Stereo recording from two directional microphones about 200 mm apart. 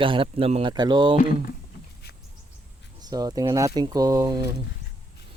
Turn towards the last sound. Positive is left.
turn(degrees=-20)  # may be behind; listen again after turning